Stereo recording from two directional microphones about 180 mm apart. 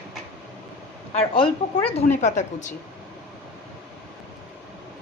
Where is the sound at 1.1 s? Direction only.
35° left (ahead or behind).